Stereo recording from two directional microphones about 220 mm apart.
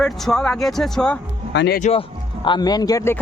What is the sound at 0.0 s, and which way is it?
A man's voice, centre (ahead or behind).